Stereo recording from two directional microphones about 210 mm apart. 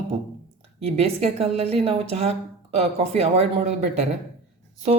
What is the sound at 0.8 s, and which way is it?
Speech, 30° right (ahead or behind).